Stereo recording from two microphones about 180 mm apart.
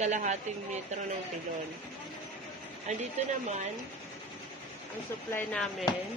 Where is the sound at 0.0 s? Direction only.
40° right (ahead or behind).